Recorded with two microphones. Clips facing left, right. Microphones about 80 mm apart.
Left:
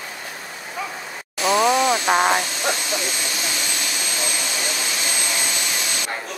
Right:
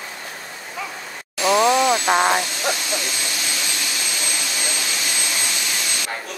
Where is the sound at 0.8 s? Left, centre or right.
Centre.